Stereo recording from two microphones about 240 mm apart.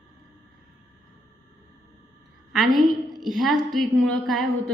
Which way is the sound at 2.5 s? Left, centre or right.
Centre.